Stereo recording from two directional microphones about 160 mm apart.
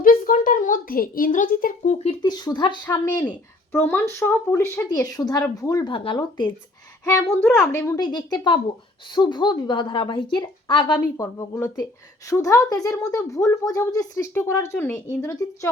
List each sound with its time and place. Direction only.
0.0 s a child's voice: 60° left (ahead or behind)
2.0 s a woman's voice: 25° left (ahead or behind)
7.3 s a woman's voice: 10° left (ahead or behind)
7.8 s a woman's voice: 20° left (ahead or behind)